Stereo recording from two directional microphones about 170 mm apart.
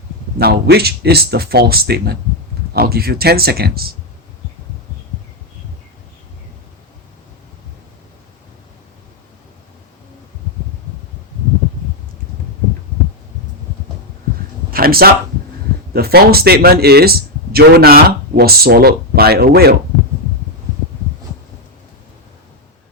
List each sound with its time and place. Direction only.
0.3 s speech: 70° right (ahead or behind)
14.7 s a sound: 60° right (ahead or behind)
15.9 s speech: 65° right (ahead or behind)